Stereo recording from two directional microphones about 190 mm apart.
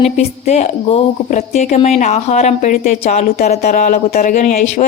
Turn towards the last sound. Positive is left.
turn(degrees=40)  # may be behind; listen again after turning